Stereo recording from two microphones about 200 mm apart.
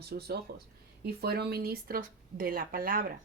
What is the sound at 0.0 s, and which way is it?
Speech, 50° right (ahead or behind).